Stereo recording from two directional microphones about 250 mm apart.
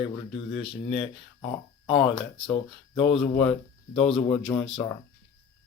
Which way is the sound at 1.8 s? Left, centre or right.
Centre.